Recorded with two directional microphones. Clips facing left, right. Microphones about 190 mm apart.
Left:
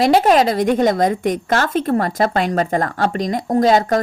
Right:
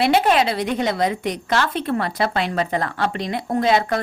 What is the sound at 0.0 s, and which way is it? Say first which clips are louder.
A woman's voice: left 4 dB; 40° left (ahead or behind).